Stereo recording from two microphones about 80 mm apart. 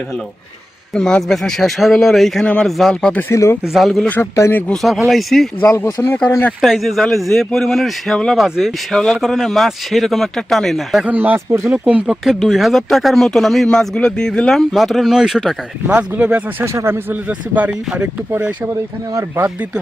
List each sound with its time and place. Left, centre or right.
0.9 s speech: centre
2.9 s speech: centre
3.2 s speech: left
3.6 s speech: centre
4.1 s speech: left
4.7 s speech: centre
5.7 s speech: left
6.6 s speech: centre
8.9 s speech: centre
11.0 s speech: right
12.4 s speech: centre
15.9 s speech: centre
16.6 s speech: right
17.2 s speech: centre